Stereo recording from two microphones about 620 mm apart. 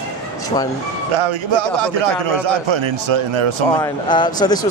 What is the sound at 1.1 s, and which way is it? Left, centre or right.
A man's voice, right.